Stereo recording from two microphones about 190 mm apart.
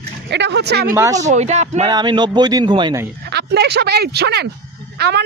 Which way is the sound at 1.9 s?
20° right (ahead or behind).